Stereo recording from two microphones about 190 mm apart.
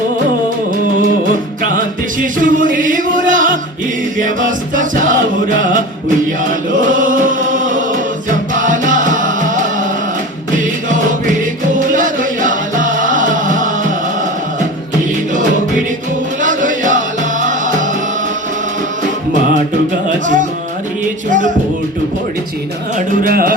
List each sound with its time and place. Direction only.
2.2 s music: 45° right (ahead or behind)
6.7 s chant: 45° right (ahead or behind)
8.5 s music: 45° right (ahead or behind)
16.4 s music: 45° right (ahead or behind)
20.1 s music: 40° right (ahead or behind)
23.0 s music: 50° right (ahead or behind)